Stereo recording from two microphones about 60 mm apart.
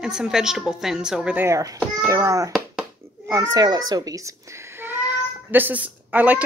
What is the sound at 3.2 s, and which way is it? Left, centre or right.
Speech, right.